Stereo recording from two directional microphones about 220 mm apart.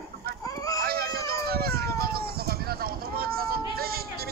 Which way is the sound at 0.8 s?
45° right (ahead or behind).